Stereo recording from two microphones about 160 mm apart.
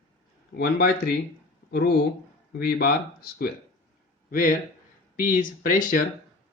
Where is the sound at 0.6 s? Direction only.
70° left (ahead or behind).